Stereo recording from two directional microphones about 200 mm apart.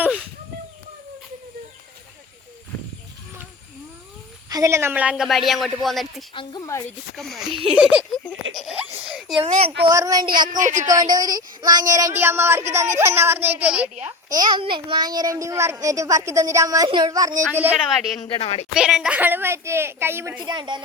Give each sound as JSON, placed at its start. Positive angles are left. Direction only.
{"t": 4.4, "sound": "speech", "side_deg": -15}
{"t": 6.3, "sound": "speech", "side_deg": 25}
{"t": 7.2, "sound": "speech", "side_deg": 0}
{"t": 7.5, "sound": "child singing", "side_deg": -30}
{"t": 7.8, "sound": "a child's voice", "side_deg": -5}
{"t": 9.4, "sound": "child singing", "side_deg": -30}
{"t": 9.8, "sound": "child singing", "side_deg": -15}
{"t": 10.6, "sound": "speech", "side_deg": -40}
{"t": 10.8, "sound": "a child's voice", "side_deg": -20}
{"t": 14.0, "sound": "a child's voice", "side_deg": -20}
{"t": 18.2, "sound": "speech", "side_deg": 30}
{"t": 18.7, "sound": "a child's voice", "side_deg": -5}